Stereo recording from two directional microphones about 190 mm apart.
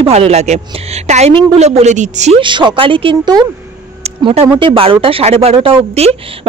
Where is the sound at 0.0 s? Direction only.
30° right (ahead or behind).